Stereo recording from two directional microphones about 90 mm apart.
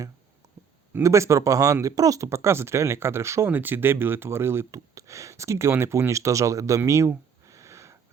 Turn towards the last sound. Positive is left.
turn(degrees=-35)  # may be behind; listen again after turning